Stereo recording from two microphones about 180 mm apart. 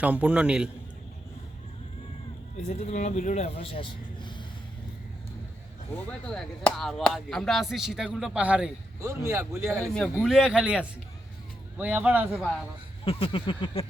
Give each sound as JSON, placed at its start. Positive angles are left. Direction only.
{"t": 0.0, "sound": "a man's voice", "side_deg": -5}
{"t": 2.6, "sound": "speech", "side_deg": 35}
{"t": 6.1, "sound": "speech", "side_deg": 5}
{"t": 10.2, "sound": "a man's voice", "side_deg": -5}
{"t": 13.1, "sound": "a sound", "side_deg": 30}